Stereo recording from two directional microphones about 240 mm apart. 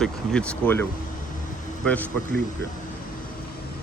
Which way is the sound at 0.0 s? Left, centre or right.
Centre.